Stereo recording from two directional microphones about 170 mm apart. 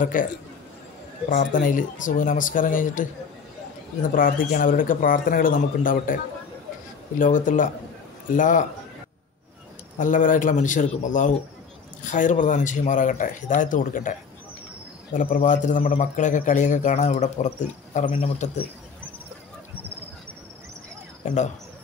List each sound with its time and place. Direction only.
0.0 s a man's voice: 50° left (ahead or behind)
1.3 s a man's voice: 55° left (ahead or behind)
4.1 s a man's voice: 55° left (ahead or behind)
9.9 s a man's voice: 50° left (ahead or behind)
15.1 s a man's voice: 50° left (ahead or behind)
21.2 s a man's voice: 45° left (ahead or behind)